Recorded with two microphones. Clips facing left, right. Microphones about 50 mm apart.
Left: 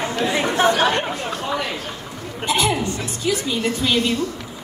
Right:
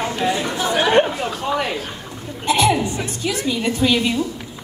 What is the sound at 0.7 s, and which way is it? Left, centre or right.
Speech, centre.